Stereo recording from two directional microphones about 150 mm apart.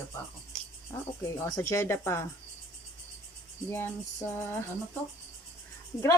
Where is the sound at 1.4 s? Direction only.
20° left (ahead or behind).